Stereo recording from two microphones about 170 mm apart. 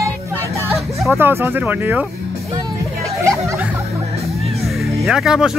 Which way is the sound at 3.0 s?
15° right (ahead or behind).